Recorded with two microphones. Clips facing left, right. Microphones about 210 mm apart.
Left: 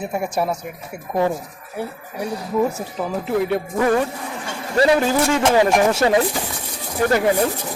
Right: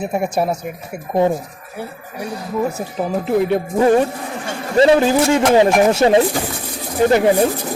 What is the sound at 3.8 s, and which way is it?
Speech, 30° right (ahead or behind).